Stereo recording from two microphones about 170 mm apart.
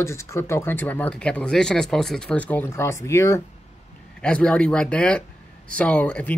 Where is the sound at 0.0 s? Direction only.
15° left (ahead or behind).